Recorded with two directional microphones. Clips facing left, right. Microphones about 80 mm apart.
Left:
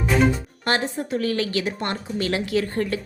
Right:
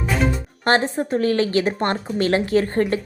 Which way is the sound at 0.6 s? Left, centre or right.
Right.